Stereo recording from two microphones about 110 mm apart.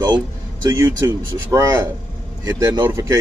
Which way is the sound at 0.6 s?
30° right (ahead or behind).